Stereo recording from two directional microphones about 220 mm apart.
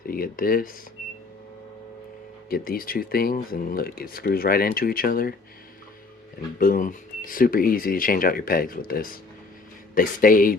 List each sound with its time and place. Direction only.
0.0 s speech: 40° left (ahead or behind)
2.5 s speech: 40° left (ahead or behind)
6.6 s speech: 40° left (ahead or behind)